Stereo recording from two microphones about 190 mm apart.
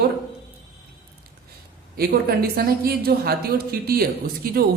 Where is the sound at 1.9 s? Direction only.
55° right (ahead or behind).